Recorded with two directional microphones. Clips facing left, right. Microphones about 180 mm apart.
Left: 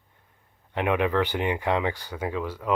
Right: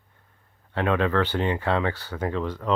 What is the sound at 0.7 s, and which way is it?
Speech, 15° left (ahead or behind).